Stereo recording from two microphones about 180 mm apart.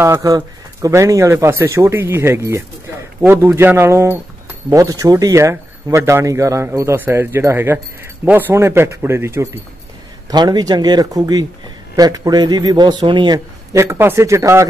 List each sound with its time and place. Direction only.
0.0 s a man's voice: 20° right (ahead or behind)